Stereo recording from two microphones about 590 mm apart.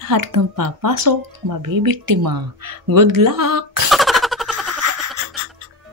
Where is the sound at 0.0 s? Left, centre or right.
Right.